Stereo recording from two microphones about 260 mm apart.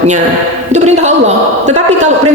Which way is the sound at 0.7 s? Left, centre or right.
Right.